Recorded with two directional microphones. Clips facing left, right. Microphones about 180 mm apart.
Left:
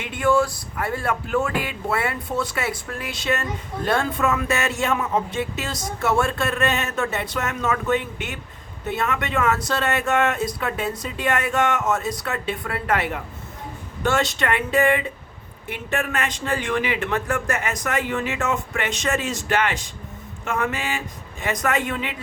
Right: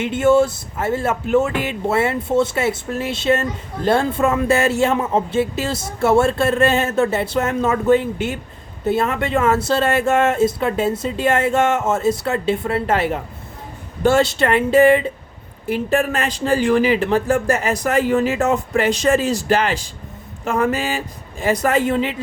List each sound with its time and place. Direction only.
0.0 s speech: 25° right (ahead or behind)